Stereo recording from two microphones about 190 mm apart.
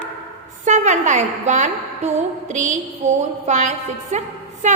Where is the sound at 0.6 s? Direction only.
40° right (ahead or behind).